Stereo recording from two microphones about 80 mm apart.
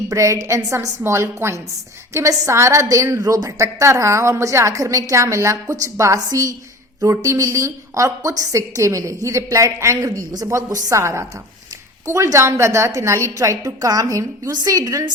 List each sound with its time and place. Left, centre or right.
0.1 s a woman's voice: right